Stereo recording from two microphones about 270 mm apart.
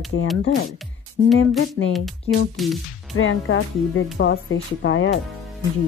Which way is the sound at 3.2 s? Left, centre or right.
Left.